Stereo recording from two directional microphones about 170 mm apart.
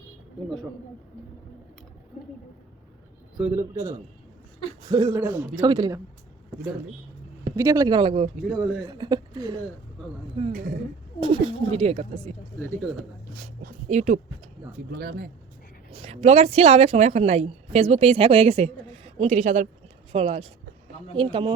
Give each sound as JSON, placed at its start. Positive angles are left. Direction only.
{"t": 3.3, "sound": "a man's voice", "side_deg": -5}
{"t": 3.6, "sound": "a man's voice", "side_deg": -15}
{"t": 7.5, "sound": "speech", "side_deg": -20}
{"t": 8.4, "sound": "speech", "side_deg": 5}
{"t": 8.9, "sound": "a woman's voice", "side_deg": -25}
{"t": 13.3, "sound": "speech", "side_deg": -55}
{"t": 14.9, "sound": "speech", "side_deg": -65}
{"t": 15.9, "sound": "a woman's voice", "side_deg": -35}